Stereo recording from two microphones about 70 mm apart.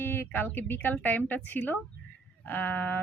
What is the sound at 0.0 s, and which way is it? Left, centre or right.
Speech, left.